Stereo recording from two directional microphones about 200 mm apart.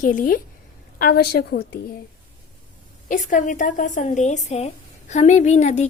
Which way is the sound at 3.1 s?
40° left (ahead or behind).